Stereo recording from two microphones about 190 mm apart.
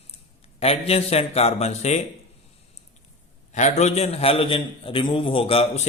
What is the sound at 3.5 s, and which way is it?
A man's voice, 40° left (ahead or behind).